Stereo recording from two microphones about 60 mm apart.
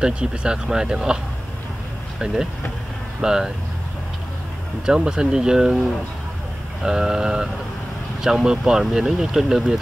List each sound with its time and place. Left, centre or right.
0.0 s speech: centre
4.8 s speech: centre